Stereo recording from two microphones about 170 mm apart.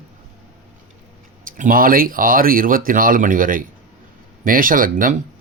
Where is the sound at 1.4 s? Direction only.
55° right (ahead or behind).